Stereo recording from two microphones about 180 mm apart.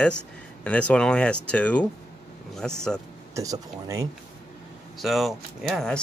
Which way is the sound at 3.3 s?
20° right (ahead or behind).